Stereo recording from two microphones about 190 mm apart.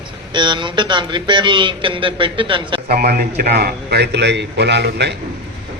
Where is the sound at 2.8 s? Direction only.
50° right (ahead or behind).